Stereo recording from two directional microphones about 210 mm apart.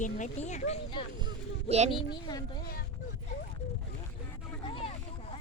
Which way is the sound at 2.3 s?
20° left (ahead or behind).